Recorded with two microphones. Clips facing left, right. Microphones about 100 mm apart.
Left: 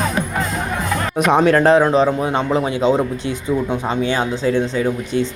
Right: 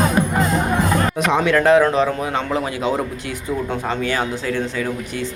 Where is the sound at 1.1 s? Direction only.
50° left (ahead or behind); by 2.9 s 25° left (ahead or behind).